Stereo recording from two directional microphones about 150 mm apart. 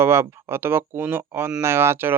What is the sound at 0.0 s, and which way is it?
Speech, 15° right (ahead or behind).